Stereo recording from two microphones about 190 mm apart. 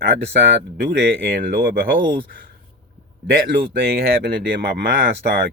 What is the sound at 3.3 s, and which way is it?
Speech, 50° right (ahead or behind).